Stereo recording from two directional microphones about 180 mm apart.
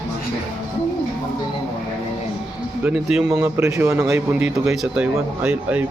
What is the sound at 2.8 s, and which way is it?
Snicker, 5° right (ahead or behind).